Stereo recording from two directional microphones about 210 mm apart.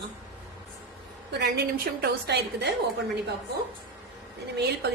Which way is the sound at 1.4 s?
50° right (ahead or behind).